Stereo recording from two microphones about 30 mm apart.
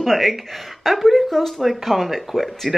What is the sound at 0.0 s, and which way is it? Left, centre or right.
A woman's voice, centre.